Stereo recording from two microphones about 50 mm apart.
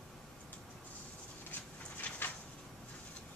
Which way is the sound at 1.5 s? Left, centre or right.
Left.